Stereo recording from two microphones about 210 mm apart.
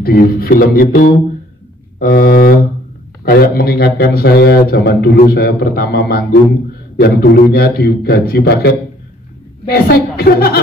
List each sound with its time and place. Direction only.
0.0 s a man's voice: 45° left (ahead or behind)